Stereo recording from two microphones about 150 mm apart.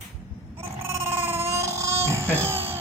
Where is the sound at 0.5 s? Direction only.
15° right (ahead or behind).